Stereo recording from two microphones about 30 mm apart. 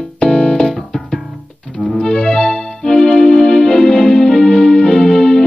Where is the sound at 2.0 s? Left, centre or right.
Left.